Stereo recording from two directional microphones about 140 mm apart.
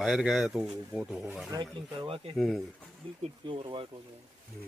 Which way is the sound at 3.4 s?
35° right (ahead or behind).